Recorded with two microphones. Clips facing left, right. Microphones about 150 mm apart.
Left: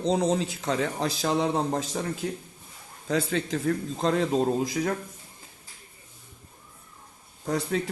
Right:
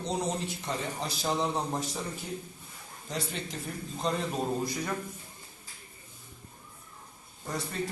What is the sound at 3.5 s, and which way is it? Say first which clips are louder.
A man's voice: left 11 dB; 90° left.